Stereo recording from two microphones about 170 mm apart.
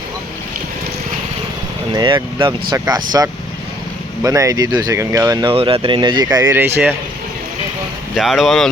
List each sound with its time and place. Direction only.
1.9 s speech: 25° right (ahead or behind)
5.5 s speech: 35° right (ahead or behind); by 6.9 s 10° right (ahead or behind)
8.1 s speech: centre (ahead or behind)